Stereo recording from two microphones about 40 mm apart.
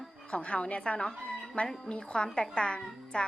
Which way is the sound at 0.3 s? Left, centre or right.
Left.